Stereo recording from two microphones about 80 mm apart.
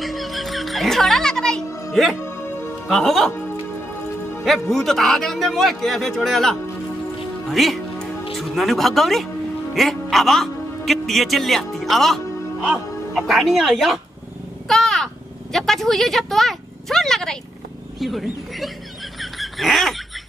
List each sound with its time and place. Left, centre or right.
0.0 s music: centre
2.2 s music: left
2.9 s a man's voice: centre
4.5 s a man's voice: centre
14.7 s a sound: centre
15.5 s a man's voice: centre
19.3 s a sound: centre